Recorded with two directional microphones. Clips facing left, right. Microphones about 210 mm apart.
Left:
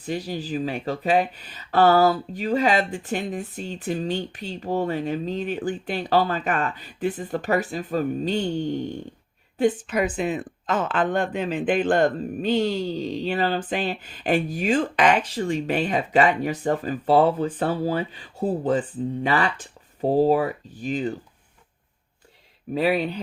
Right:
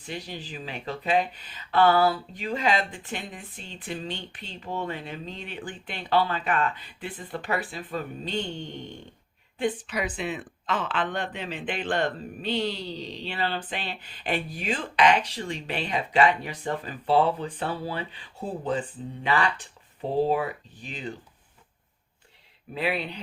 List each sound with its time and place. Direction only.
0.0 s speech: 40° left (ahead or behind)
22.7 s speech: 40° left (ahead or behind)